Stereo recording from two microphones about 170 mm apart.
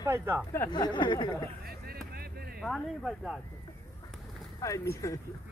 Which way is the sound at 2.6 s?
Centre (ahead or behind).